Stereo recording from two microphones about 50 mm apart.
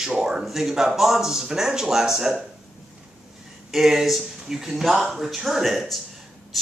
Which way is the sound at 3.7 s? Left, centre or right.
Centre.